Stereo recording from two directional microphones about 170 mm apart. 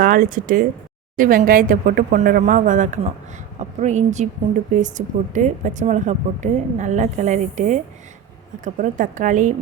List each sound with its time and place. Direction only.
0.0 s a woman's voice: 55° right (ahead or behind)